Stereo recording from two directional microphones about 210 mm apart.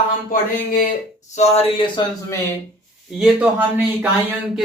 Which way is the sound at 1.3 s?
30° left (ahead or behind).